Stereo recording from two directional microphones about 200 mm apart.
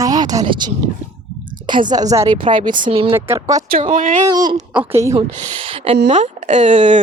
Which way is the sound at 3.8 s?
40° right (ahead or behind).